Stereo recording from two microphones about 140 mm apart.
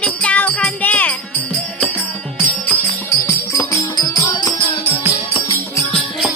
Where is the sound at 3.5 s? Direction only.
20° left (ahead or behind).